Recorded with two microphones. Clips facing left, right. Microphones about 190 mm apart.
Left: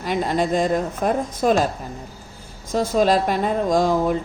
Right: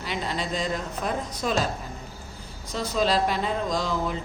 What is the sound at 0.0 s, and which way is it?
Speech, 50° left (ahead or behind).